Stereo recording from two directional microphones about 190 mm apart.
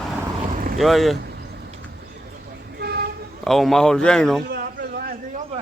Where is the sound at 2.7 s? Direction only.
55° right (ahead or behind).